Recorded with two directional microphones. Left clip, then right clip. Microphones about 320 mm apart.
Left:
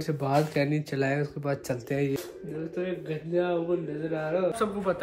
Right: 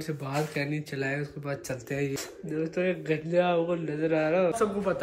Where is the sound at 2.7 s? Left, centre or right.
Right.